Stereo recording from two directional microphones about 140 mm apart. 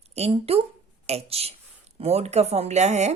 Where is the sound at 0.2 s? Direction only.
45° right (ahead or behind).